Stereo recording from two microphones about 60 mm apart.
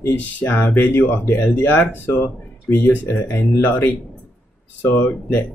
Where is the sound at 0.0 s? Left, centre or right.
Left.